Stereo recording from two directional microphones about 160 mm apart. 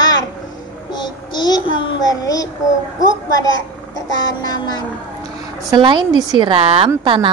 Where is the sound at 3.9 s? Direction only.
25° left (ahead or behind).